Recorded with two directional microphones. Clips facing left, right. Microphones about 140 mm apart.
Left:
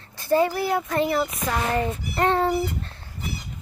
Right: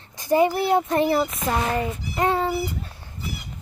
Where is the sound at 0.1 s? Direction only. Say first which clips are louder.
Right 2 dB; 15° right (ahead or behind).